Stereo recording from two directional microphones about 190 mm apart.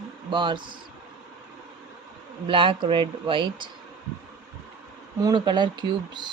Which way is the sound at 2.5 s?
25° right (ahead or behind).